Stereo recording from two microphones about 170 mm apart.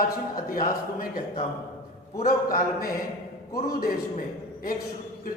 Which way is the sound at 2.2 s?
55° left (ahead or behind).